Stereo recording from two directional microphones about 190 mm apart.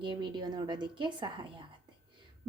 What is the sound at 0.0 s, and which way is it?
A woman's voice, 25° right (ahead or behind).